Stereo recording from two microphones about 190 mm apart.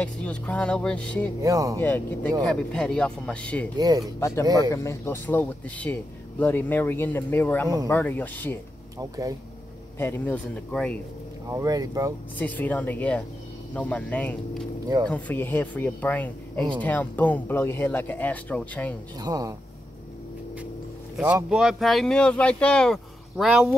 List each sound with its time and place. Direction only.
0.0 s speech: 5° left (ahead or behind)
1.4 s speech: 15° right (ahead or behind)
1.8 s speech: 10° left (ahead or behind)
3.7 s speech: 20° right (ahead or behind)
4.6 s speech: 15° left (ahead or behind)
8.9 s speech: 15° right (ahead or behind)
9.9 s speech: 10° left (ahead or behind)
11.5 s speech: 20° right (ahead or behind)
12.4 s speech: 10° left (ahead or behind)
19.1 s speech: 20° right (ahead or behind)
21.2 s speech: 15° right (ahead or behind)
21.5 s speech: 5° right (ahead or behind)